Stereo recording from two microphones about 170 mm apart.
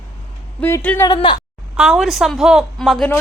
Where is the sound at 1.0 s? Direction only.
25° left (ahead or behind).